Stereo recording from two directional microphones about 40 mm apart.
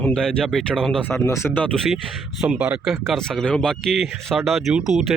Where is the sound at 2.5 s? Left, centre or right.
Right.